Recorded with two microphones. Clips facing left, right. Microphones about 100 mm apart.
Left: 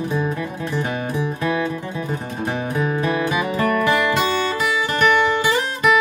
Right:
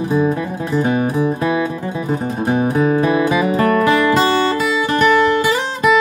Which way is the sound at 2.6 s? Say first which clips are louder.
Right 7 dB; 35° right (ahead or behind).